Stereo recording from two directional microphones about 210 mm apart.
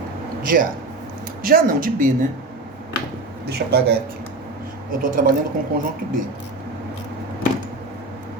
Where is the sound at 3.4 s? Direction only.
50° right (ahead or behind).